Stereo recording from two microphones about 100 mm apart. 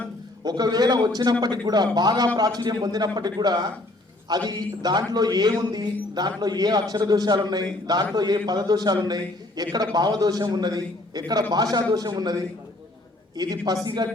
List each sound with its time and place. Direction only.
0.4 s a man's voice: 45° right (ahead or behind)